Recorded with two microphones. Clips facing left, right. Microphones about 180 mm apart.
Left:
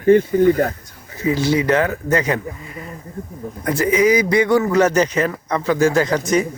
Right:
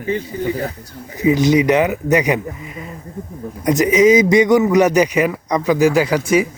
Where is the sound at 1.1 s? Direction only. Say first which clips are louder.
Right 4 dB; 15° right (ahead or behind).